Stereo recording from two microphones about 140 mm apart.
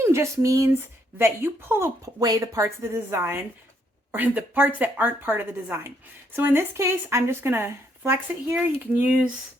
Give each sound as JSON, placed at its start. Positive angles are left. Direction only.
{"t": 0.0, "sound": "a woman's voice", "side_deg": -20}